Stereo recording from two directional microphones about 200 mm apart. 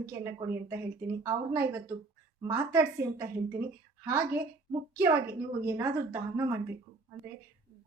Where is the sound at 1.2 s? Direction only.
15° right (ahead or behind).